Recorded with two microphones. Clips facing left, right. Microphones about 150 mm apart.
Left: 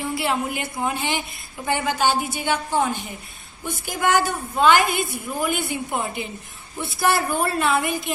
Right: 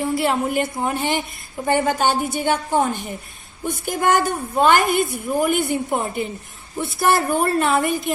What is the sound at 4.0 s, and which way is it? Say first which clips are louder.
A woman's voice: right 2 dB; 45° right (ahead or behind).